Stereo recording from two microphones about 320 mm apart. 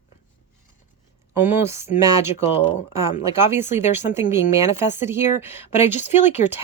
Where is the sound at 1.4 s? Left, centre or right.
Centre.